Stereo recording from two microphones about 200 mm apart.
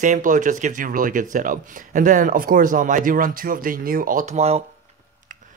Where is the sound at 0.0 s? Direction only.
40° right (ahead or behind).